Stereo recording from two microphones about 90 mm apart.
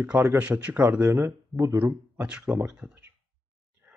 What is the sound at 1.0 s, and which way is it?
Speech, 25° right (ahead or behind).